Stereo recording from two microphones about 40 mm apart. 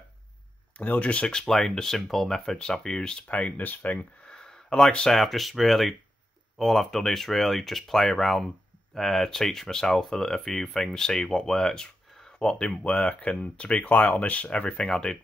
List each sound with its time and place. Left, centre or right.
0.7 s speech: left
1.5 s speech: centre
3.3 s speech: left
4.3 s a sound: centre
5.1 s speech: centre; by 13.8 s left
13.8 s speech: left; by 15.1 s centre